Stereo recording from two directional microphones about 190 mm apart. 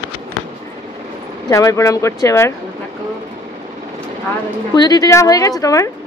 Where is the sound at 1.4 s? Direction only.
15° left (ahead or behind).